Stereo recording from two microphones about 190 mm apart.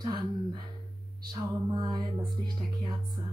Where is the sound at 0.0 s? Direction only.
25° right (ahead or behind).